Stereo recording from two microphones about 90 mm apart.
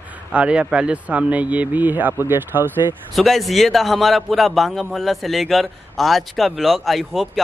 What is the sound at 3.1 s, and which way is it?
A man's voice, centre (ahead or behind).